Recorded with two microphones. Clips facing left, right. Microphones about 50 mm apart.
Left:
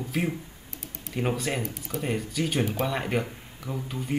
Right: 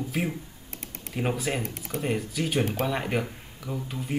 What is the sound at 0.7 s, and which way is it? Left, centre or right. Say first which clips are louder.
Typing: right 2 dB; right.